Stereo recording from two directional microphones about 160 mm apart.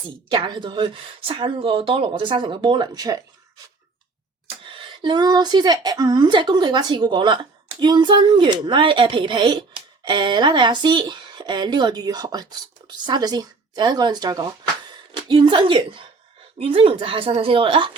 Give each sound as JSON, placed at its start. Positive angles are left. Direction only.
{"t": 0.3, "sound": "speech", "side_deg": -30}
{"t": 4.6, "sound": "a woman's voice", "side_deg": -30}